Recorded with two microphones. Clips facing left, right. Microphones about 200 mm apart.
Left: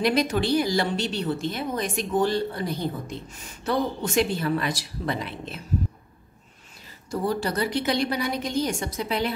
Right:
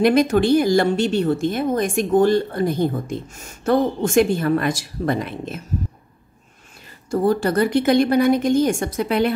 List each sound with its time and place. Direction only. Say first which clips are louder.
0.0 s speech: right 7 dB; 50° right (ahead or behind)
7.1 s speech: right 8 dB; 50° right (ahead or behind)